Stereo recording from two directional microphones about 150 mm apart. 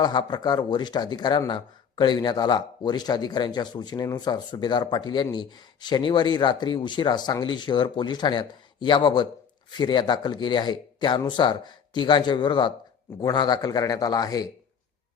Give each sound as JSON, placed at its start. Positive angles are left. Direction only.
{"t": 0.0, "sound": "speech", "side_deg": 30}